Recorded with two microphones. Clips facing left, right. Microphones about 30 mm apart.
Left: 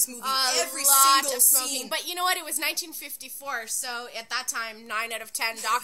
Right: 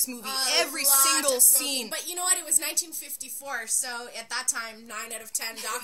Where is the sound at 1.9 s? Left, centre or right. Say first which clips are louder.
Left 5 dB; left.